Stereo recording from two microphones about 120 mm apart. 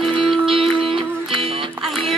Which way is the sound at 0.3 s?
Centre (ahead or behind).